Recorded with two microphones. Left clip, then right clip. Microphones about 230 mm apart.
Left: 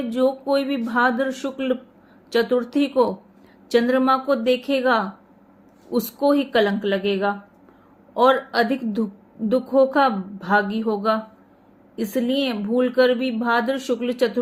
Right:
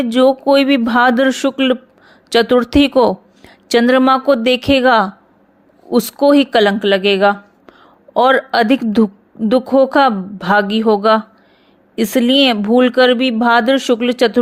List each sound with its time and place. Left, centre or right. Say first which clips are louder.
0.1 s speech: right 9 dB; right